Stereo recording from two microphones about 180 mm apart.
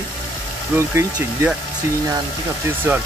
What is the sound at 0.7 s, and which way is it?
Speech, 15° right (ahead or behind).